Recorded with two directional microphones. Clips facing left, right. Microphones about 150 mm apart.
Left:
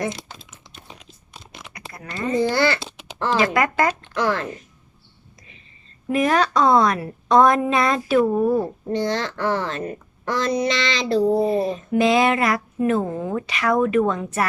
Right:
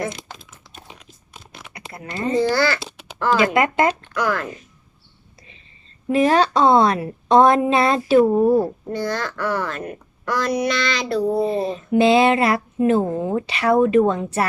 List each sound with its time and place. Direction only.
1.7 s a sound: 30° right (ahead or behind)
2.4 s a child's voice: 20° left (ahead or behind)
3.4 s speech: 25° right (ahead or behind)
4.1 s a woman's voice: 25° left (ahead or behind)
6.1 s speech: 30° right (ahead or behind)
8.9 s a woman's voice: 20° left (ahead or behind)
11.4 s speech: 30° right (ahead or behind)